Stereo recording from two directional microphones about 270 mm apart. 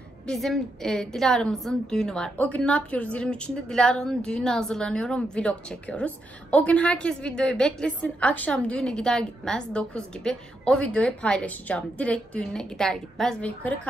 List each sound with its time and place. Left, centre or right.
0.3 s a woman's voice: centre